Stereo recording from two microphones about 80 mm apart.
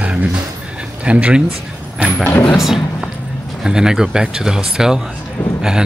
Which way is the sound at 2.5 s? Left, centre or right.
Centre.